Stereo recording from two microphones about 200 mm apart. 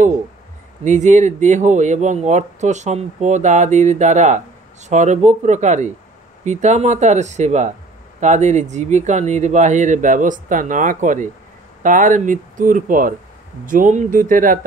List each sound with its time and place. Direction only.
0.8 s speech: 35° right (ahead or behind)